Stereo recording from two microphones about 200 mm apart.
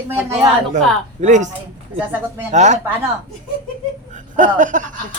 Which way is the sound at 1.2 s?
35° right (ahead or behind).